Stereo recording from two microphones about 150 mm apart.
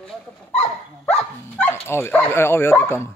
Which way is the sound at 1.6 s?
15° left (ahead or behind).